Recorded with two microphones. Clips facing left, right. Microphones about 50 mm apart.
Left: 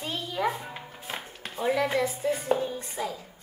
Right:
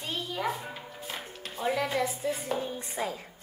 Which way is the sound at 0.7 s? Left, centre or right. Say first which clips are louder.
Left 2 dB; centre.